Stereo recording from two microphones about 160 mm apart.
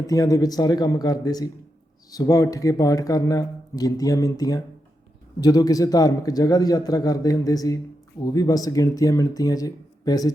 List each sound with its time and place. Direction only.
0.1 s speech: 20° left (ahead or behind)